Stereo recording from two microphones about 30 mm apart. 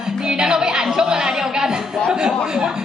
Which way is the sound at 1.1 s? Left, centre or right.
Right.